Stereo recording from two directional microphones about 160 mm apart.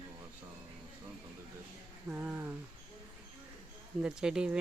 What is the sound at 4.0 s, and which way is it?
Speech, 5° right (ahead or behind).